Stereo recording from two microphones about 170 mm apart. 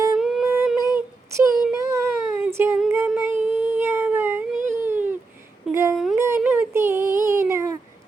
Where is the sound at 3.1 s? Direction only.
15° right (ahead or behind).